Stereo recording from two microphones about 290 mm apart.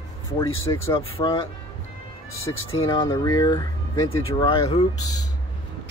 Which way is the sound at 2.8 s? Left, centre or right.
Centre.